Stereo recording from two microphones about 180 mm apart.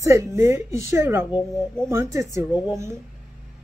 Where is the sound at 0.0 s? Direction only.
15° right (ahead or behind).